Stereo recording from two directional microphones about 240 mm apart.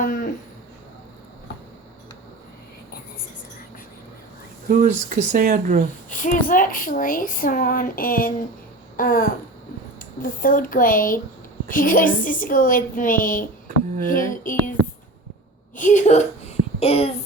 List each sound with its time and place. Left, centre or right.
0.0 s a sound: left
4.7 s speech: right
6.1 s a woman's voice: left
15.7 s a woman's voice: left